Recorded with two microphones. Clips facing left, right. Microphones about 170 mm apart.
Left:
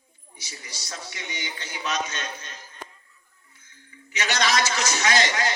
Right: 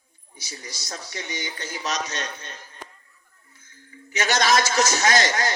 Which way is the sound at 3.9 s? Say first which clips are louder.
Right 5 dB; 45° right (ahead or behind).